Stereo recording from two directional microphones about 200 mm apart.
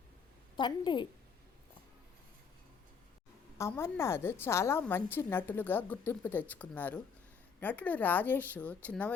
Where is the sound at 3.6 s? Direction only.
15° left (ahead or behind).